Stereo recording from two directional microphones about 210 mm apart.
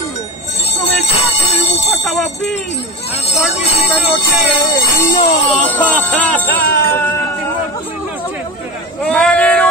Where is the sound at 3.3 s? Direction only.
30° left (ahead or behind).